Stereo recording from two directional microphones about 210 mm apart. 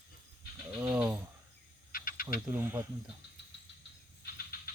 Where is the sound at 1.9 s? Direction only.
40° left (ahead or behind).